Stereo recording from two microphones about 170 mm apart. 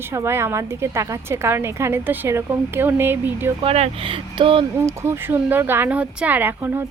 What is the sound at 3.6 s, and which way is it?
Speech, 35° right (ahead or behind).